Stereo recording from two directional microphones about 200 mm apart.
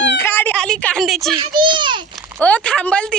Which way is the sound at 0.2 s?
10° left (ahead or behind).